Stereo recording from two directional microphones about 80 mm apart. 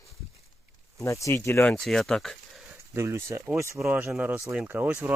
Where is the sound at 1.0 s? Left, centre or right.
Left.